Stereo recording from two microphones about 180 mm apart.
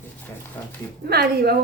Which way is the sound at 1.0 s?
60° right (ahead or behind).